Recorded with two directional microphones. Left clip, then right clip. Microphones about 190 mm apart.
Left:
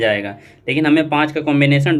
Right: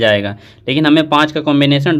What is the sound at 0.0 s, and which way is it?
A man's voice, 40° right (ahead or behind).